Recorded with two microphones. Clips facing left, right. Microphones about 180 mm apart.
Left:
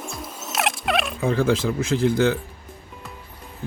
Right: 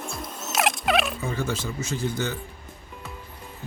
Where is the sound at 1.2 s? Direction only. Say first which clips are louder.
Left 8 dB; 90° left.